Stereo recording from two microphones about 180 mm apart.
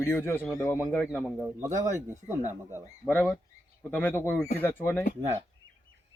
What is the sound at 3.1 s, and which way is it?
Speech, centre (ahead or behind).